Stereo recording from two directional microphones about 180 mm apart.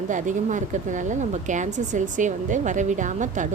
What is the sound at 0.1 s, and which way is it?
A woman's voice, 45° right (ahead or behind).